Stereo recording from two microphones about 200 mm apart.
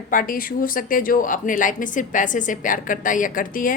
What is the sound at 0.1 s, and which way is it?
A woman's voice, 45° left (ahead or behind).